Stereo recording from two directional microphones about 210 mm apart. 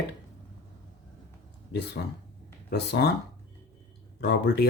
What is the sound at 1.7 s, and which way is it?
Speech, 50° left (ahead or behind).